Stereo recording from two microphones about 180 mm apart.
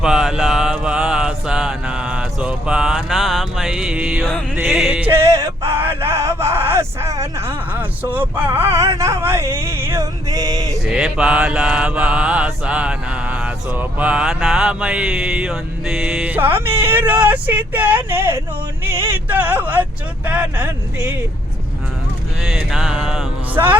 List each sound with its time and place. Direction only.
0.0 s mantra: 5° right (ahead or behind)
4.5 s music: 5° right (ahead or behind)
5.8 s mantra: 15° right (ahead or behind)
10.8 s mantra: 5° right (ahead or behind)
18.9 s speech: 15° right (ahead or behind)
22.4 s music: centre (ahead or behind)